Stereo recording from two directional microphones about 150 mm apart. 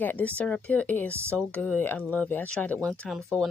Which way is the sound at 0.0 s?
10° left (ahead or behind).